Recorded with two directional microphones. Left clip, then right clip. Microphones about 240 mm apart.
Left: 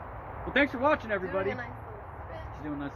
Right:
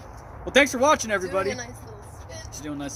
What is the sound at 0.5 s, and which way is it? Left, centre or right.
Speech, right.